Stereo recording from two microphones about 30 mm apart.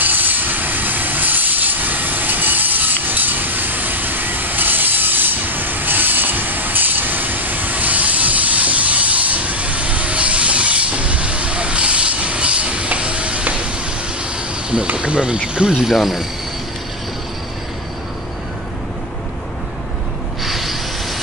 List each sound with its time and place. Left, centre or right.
0.0 s train: right
15.0 s speech: right
15.7 s speech: centre
20.4 s a sound: centre